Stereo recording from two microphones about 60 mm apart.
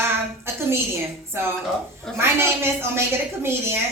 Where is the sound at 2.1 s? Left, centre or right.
Right.